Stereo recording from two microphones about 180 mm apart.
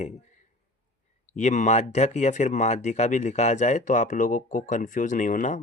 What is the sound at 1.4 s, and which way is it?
Speech, 40° left (ahead or behind).